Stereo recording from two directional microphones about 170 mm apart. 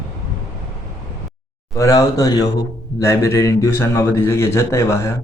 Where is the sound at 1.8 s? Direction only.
20° left (ahead or behind).